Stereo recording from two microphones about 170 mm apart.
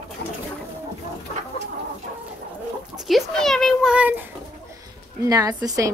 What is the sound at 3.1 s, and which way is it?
A child's voice, centre (ahead or behind).